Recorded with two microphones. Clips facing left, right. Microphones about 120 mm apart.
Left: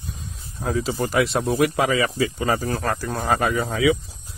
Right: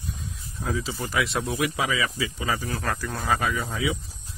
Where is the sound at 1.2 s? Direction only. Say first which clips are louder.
Left 6 dB; 35° left (ahead or behind).